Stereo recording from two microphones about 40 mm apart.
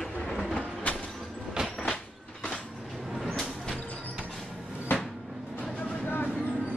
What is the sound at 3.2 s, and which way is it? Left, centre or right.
Vehicle, centre.